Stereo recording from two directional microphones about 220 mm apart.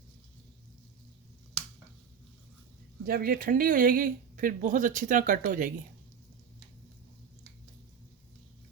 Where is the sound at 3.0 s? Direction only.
40° right (ahead or behind).